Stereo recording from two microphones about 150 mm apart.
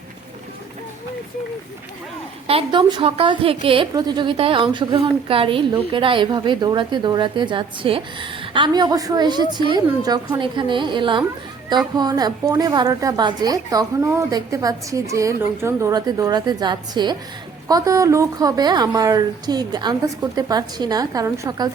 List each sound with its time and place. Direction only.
2.5 s a woman's voice: 35° right (ahead or behind); by 21.7 s 20° right (ahead or behind)